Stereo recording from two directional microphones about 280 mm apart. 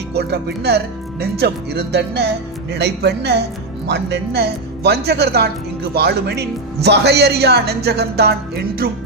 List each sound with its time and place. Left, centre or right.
0.1 s speech: right